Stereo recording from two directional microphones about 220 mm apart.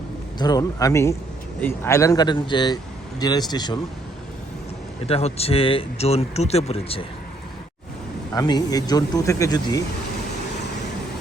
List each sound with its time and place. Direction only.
0.3 s speech: 15° left (ahead or behind)
5.0 s speech: 25° left (ahead or behind)
8.3 s speech: 15° left (ahead or behind)